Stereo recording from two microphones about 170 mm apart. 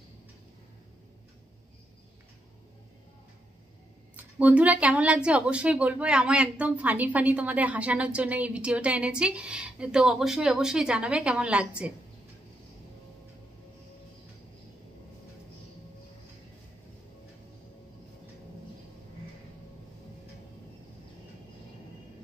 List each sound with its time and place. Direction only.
4.2 s speech: 10° right (ahead or behind)